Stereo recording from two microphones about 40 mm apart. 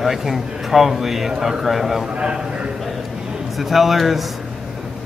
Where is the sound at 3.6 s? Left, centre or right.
Centre.